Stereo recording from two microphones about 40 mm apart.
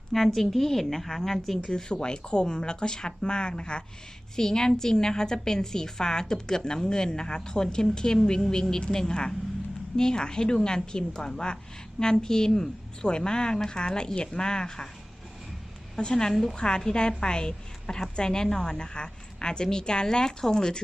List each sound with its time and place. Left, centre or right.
0.1 s a woman's voice: centre
1.6 s a woman's voice: centre
16.0 s a woman's voice: centre
16.6 s a woman's voice: left